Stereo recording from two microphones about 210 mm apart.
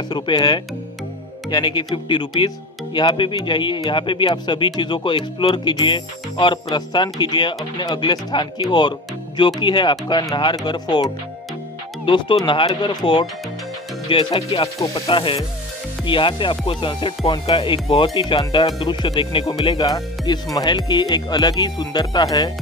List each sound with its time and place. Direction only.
0.1 s speech: 20° left (ahead or behind)
12.4 s speech: 20° left (ahead or behind)